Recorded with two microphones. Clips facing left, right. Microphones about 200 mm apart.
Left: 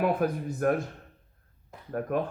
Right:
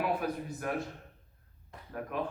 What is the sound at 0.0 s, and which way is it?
Speech, 50° left (ahead or behind).